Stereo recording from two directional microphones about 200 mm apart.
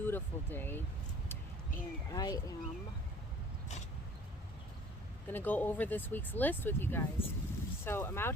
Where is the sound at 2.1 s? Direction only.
20° left (ahead or behind).